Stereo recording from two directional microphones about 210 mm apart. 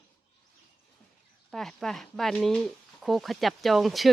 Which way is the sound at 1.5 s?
Centre (ahead or behind).